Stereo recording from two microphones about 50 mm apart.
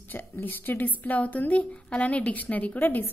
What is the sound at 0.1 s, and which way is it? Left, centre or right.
A woman's voice, left.